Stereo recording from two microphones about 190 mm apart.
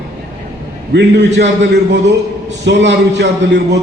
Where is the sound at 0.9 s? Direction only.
65° right (ahead or behind).